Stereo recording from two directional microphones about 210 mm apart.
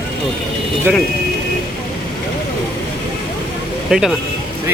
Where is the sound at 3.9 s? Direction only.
Centre (ahead or behind).